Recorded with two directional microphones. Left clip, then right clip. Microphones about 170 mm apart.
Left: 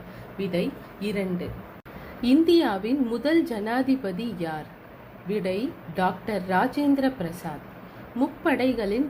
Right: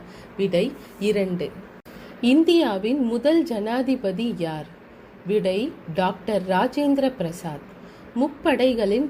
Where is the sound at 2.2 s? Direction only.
35° right (ahead or behind).